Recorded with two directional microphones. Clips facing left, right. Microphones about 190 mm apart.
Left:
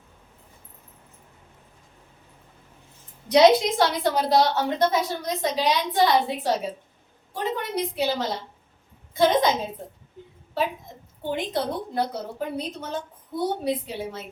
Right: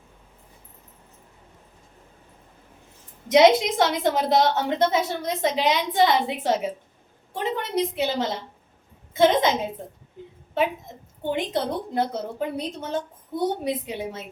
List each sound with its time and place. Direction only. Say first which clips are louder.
3.2 s a woman's voice: even; 20° right (ahead or behind)
11.2 s a woman's voice: right 1 dB; 20° right (ahead or behind)